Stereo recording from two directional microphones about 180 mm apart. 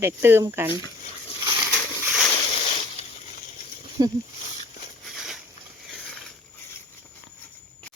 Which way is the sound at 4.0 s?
20° right (ahead or behind).